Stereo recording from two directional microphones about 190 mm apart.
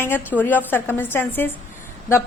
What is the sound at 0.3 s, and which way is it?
A woman's voice, 10° left (ahead or behind).